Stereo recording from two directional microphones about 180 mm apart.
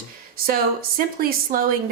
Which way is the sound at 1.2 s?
55° right (ahead or behind).